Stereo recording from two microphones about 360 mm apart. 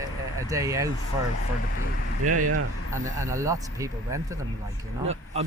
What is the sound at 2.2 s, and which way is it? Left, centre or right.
Speech, right.